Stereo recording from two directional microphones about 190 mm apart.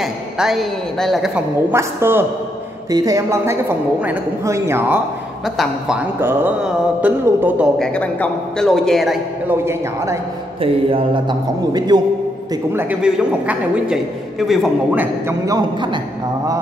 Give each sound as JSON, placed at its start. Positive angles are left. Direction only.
{"t": 0.0, "sound": "a man's voice", "side_deg": 0}
{"t": 1.7, "sound": "a woman's voice", "side_deg": -15}
{"t": 7.8, "sound": "a man's voice", "side_deg": 5}
{"t": 10.6, "sound": "a man's voice", "side_deg": -30}
{"t": 12.7, "sound": "a man's voice", "side_deg": -5}